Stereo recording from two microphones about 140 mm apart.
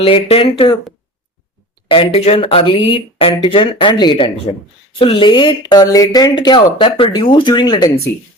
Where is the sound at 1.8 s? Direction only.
40° left (ahead or behind).